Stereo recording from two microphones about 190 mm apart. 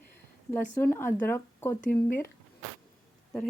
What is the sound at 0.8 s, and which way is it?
Speech, 10° left (ahead or behind).